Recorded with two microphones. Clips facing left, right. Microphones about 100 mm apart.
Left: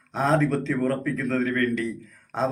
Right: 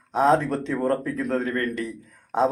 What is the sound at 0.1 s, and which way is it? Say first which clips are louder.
Speech: right 2 dB; 20° right (ahead or behind).